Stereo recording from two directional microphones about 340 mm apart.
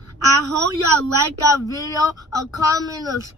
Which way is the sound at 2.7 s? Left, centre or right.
Centre.